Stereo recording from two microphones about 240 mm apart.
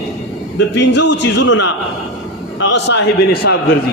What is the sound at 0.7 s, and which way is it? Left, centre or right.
A man's voice, left.